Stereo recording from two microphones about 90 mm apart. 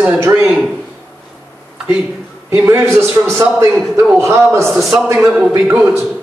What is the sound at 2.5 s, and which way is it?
A man's voice, 30° right (ahead or behind).